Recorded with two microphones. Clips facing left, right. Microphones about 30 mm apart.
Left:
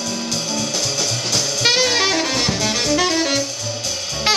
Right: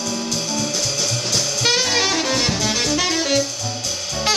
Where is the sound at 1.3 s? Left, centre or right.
Centre.